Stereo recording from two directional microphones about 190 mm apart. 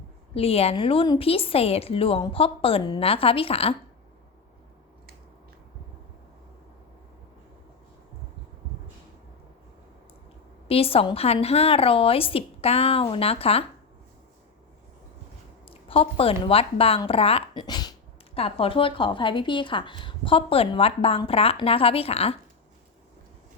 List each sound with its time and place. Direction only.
0.3 s a woman's voice: 30° left (ahead or behind)
10.7 s a woman's voice: 30° left (ahead or behind)
15.6 s a sound: 30° left (ahead or behind)
16.4 s a woman's voice: 30° left (ahead or behind)